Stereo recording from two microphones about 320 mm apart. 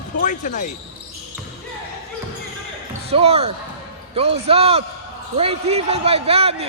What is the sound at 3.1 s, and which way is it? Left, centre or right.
Speech, centre.